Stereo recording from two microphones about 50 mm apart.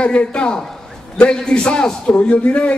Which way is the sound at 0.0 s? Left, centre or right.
Left.